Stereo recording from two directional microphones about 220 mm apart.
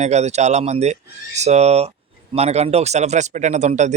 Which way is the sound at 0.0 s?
30° right (ahead or behind).